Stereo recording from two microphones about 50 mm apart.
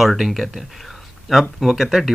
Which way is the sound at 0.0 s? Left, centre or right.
Centre.